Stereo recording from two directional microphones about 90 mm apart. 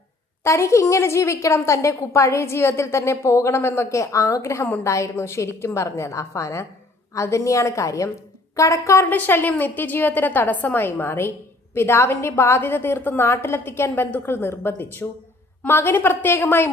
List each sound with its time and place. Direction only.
0.4 s a woman's voice: 30° left (ahead or behind)
9.1 s a woman's voice: 20° left (ahead or behind)